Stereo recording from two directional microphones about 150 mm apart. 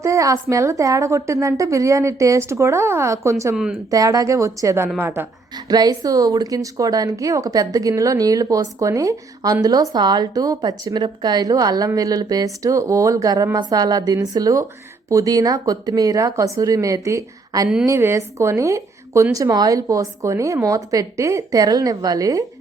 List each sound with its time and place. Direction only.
0.0 s a woman's voice: 20° right (ahead or behind)
3.5 s speech: 5° right (ahead or behind)
3.8 s a woman's voice: 25° right (ahead or behind)
5.5 s a woman's voice: 25° right (ahead or behind)